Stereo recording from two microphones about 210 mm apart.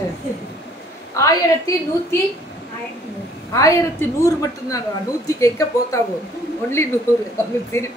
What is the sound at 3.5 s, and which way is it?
A woman's voice, 15° left (ahead or behind).